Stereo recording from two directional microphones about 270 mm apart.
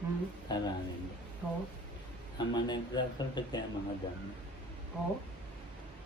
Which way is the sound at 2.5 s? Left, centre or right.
Centre.